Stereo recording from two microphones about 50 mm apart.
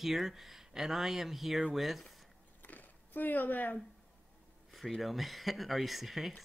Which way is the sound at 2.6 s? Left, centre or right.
Left.